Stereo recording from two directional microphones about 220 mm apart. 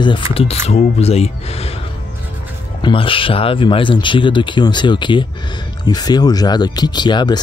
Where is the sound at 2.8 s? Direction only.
25° left (ahead or behind).